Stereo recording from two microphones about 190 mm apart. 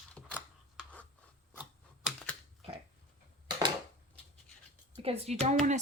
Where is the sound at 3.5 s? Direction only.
25° right (ahead or behind).